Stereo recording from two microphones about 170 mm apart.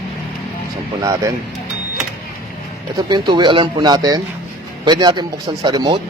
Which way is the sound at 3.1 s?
25° right (ahead or behind).